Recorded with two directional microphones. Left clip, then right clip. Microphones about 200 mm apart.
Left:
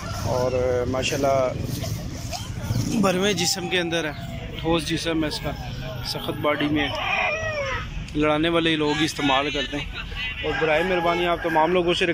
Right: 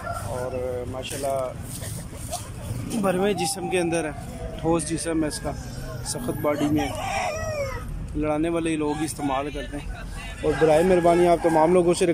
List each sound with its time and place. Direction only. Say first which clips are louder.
0.3 s fowl: left 9 dB; 15° left (ahead or behind)
1.0 s speech: left 5 dB; 5° left (ahead or behind)
2.9 s speech: left 1 dB; centre (ahead or behind)
10.4 s speech: right 3 dB; 20° right (ahead or behind)